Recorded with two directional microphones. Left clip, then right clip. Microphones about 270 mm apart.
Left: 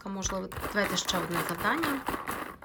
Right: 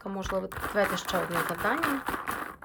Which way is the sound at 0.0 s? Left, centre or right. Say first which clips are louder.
Right 3 dB; centre.